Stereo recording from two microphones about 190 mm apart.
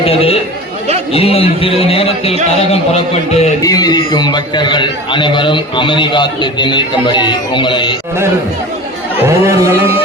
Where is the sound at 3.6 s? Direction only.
20° left (ahead or behind).